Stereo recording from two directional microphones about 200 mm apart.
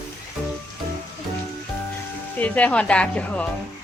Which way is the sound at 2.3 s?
5° left (ahead or behind).